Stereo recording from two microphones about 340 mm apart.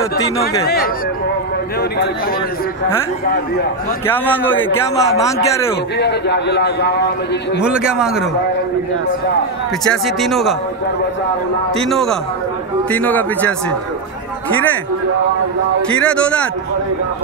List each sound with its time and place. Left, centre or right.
4.1 s a man's voice: centre
5.9 s a man's voice: left
7.6 s a man's voice: centre
9.8 s a man's voice: centre
11.8 s a man's voice: centre
16.0 s a man's voice: centre